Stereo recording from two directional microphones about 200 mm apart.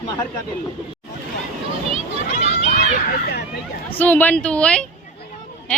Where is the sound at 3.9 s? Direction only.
10° left (ahead or behind).